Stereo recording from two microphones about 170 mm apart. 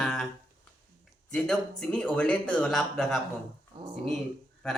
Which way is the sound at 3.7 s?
30° right (ahead or behind).